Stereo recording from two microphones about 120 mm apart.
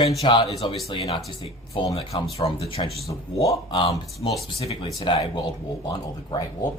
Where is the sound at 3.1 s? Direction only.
25° left (ahead or behind).